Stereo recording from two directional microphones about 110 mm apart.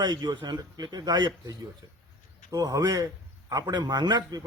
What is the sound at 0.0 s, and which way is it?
A man's voice, 35° right (ahead or behind).